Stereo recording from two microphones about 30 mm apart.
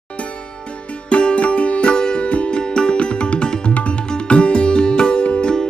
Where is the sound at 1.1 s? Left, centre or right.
Left.